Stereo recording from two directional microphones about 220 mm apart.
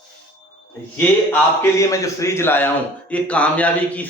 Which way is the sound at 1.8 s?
15° left (ahead or behind).